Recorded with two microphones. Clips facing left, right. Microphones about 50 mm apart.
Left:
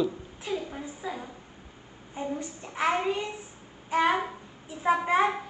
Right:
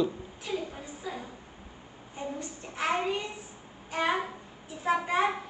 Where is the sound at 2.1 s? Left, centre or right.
Centre.